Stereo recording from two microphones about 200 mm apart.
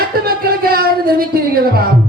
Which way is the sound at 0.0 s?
50° right (ahead or behind).